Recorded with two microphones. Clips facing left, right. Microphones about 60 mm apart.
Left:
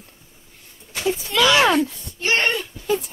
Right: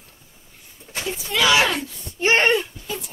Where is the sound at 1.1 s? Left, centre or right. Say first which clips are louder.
Left 1 dB; centre.